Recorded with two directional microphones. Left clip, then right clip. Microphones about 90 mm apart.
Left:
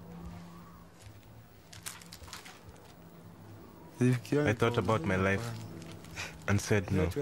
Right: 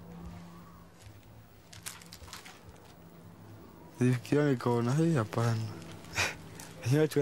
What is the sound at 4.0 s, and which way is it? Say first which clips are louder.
Speech: right 1 dB; 20° left (ahead or behind).